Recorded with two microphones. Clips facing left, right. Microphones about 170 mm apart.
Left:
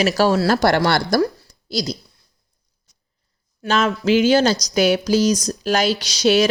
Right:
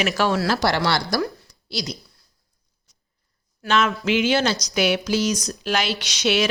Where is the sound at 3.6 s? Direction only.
35° left (ahead or behind).